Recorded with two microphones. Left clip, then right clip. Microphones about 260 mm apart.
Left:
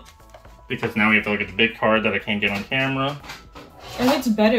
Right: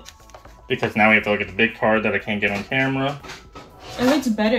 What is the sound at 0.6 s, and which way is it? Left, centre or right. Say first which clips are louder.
Speech: right 3 dB; centre.